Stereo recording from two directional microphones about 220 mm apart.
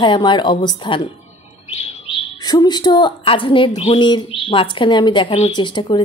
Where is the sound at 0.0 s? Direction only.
20° left (ahead or behind).